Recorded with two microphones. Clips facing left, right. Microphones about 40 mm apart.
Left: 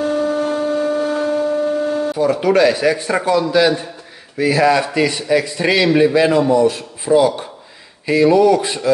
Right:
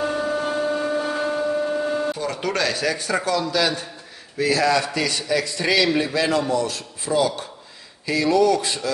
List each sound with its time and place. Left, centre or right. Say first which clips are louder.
0.0 s shofar: left 5 dB; centre
2.1 s a man's voice: left 10 dB; centre